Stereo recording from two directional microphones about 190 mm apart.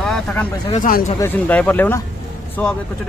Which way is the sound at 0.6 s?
45° left (ahead or behind).